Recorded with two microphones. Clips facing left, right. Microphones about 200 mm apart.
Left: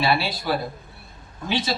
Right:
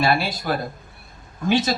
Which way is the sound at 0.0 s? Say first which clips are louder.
Right 2 dB; 45° right (ahead or behind).